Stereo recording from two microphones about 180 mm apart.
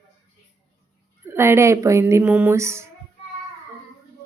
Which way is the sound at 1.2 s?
15° right (ahead or behind).